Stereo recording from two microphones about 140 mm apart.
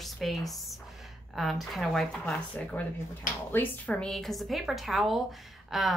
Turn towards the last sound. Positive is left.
turn(degrees=0)  # may be behind; listen again after turning